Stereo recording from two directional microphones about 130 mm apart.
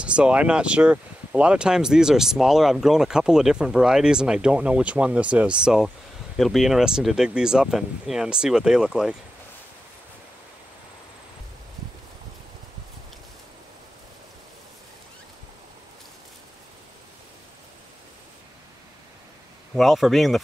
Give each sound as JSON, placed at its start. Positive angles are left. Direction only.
{"t": 0.0, "sound": "speech", "side_deg": -10}
{"t": 19.7, "sound": "speech", "side_deg": 0}